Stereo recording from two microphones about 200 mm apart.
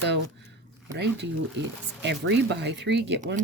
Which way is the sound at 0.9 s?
60° right (ahead or behind).